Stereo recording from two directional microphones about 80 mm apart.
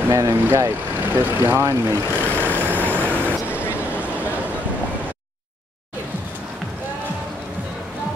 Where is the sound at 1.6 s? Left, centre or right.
Right.